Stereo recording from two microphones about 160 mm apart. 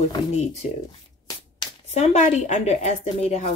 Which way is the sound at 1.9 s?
45° left (ahead or behind).